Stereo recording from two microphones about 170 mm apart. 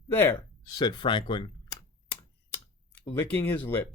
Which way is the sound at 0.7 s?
25° left (ahead or behind).